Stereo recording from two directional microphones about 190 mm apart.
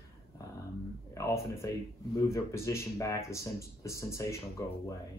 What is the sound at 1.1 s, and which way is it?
Speech, 15° left (ahead or behind).